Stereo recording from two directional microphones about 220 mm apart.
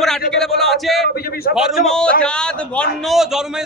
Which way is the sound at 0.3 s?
Centre (ahead or behind).